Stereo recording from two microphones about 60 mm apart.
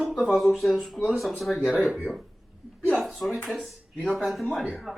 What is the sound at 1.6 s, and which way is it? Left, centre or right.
Speech, centre.